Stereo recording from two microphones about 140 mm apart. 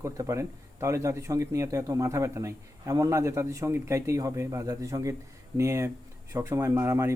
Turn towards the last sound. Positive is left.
turn(degrees=-20)  # may be behind; listen again after turning